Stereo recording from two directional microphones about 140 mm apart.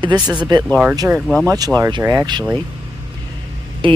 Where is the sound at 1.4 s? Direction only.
25° right (ahead or behind).